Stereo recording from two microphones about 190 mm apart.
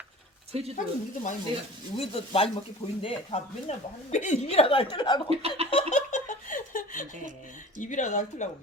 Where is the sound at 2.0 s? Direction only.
30° left (ahead or behind).